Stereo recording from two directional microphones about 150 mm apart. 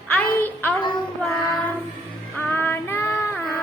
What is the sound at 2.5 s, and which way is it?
Child singing, 15° left (ahead or behind).